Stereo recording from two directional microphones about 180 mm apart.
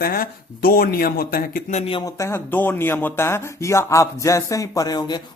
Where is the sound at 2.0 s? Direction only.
15° left (ahead or behind).